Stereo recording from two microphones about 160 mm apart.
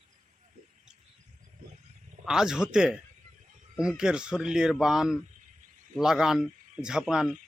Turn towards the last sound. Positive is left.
turn(degrees=-5)  # may be behind; listen again after turning